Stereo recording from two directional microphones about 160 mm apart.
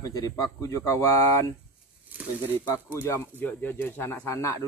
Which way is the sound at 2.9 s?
15° left (ahead or behind).